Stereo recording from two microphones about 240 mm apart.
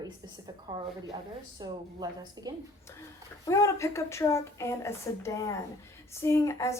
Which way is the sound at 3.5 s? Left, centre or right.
Centre.